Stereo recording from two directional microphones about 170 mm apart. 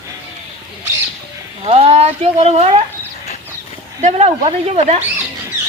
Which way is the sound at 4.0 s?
40° right (ahead or behind).